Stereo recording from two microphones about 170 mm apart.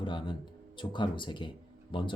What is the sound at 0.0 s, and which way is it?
Music, 30° left (ahead or behind).